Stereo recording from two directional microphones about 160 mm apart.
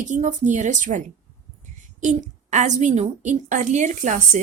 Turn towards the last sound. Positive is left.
turn(degrees=-50)  # may be behind; listen again after turning